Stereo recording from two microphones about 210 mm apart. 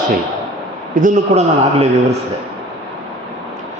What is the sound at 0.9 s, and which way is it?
Speech, 35° right (ahead or behind).